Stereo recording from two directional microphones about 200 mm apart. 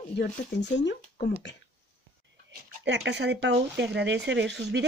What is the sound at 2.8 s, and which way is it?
Speech, 60° right (ahead or behind).